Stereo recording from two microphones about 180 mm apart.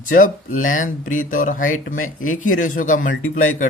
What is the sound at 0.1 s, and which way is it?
A man's voice, 50° left (ahead or behind).